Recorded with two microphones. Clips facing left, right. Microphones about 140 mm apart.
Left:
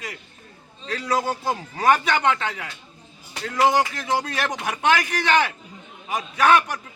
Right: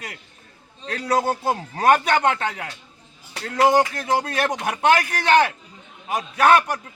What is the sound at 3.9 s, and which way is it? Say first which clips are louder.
Speech: right 2 dB; 50° right (ahead or behind).